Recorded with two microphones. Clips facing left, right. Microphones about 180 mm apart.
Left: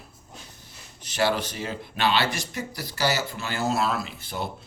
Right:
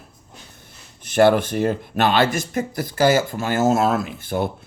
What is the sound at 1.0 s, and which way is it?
Speech, 55° right (ahead or behind).